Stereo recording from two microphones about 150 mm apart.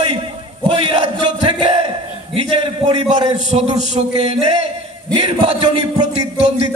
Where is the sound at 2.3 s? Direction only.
40° right (ahead or behind).